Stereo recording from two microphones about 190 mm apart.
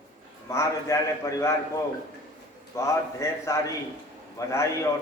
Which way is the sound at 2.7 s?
15° left (ahead or behind).